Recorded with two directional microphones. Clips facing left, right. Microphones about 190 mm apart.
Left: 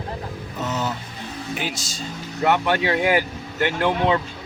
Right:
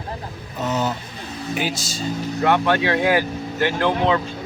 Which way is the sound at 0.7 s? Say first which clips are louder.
Right 4 dB; 35° right (ahead or behind).